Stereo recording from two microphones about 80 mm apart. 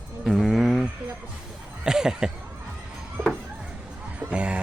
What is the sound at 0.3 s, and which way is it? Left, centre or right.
Music, centre.